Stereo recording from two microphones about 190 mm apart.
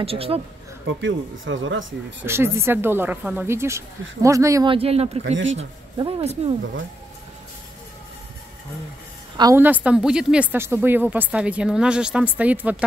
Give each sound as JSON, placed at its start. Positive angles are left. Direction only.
{"t": 0.0, "sound": "speech", "side_deg": -30}
{"t": 1.0, "sound": "speech", "side_deg": -85}
{"t": 2.2, "sound": "a woman's voice", "side_deg": -15}
{"t": 4.7, "sound": "speech", "side_deg": -30}
{"t": 5.2, "sound": "speech", "side_deg": -80}
{"t": 5.9, "sound": "speech", "side_deg": -25}
{"t": 9.4, "sound": "a woman's voice", "side_deg": -15}